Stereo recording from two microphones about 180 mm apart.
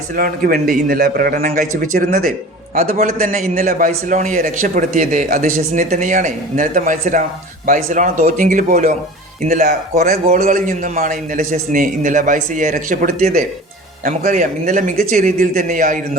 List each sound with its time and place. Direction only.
0.2 s a man's voice: 55° right (ahead or behind)
10.1 s a man's voice: 50° right (ahead or behind)